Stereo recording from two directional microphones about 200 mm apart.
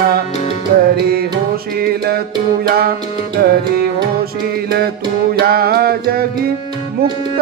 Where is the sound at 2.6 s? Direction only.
50° right (ahead or behind).